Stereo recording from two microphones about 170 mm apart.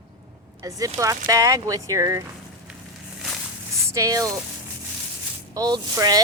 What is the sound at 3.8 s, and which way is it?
Speech, 20° right (ahead or behind).